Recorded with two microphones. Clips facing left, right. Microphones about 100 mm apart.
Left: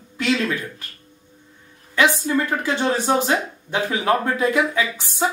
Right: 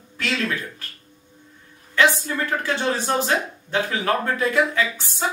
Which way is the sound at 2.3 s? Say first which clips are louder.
Left 3 dB; 15° left (ahead or behind).